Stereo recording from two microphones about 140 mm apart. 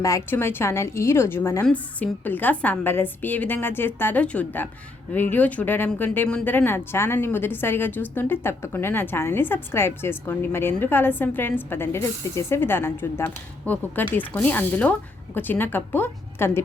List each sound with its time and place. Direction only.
0.0 s a woman's voice: 20° left (ahead or behind)